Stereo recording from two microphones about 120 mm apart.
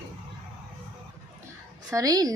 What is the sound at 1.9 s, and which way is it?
Speech, 30° right (ahead or behind).